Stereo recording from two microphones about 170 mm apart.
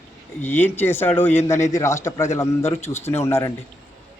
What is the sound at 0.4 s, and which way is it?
Speech, 10° left (ahead or behind).